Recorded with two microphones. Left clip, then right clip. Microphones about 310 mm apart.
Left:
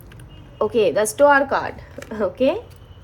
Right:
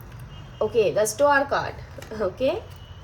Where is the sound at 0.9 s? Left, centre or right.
Centre.